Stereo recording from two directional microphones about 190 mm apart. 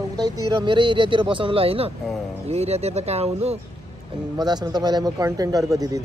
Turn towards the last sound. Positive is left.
turn(degrees=-20)  # may be behind; listen again after turning